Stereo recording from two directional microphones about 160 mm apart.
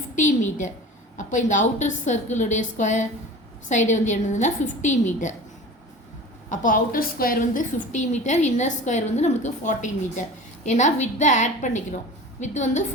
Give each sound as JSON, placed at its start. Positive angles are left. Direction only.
{"t": 0.2, "sound": "a woman's voice", "side_deg": 50}
{"t": 6.5, "sound": "a woman's voice", "side_deg": 55}